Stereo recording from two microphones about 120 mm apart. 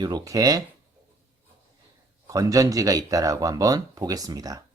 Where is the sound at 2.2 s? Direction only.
30° right (ahead or behind).